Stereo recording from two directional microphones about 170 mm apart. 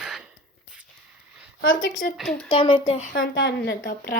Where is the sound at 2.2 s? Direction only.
Centre (ahead or behind).